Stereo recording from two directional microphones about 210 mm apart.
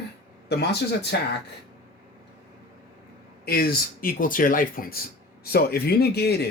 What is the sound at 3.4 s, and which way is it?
Speech, 45° left (ahead or behind).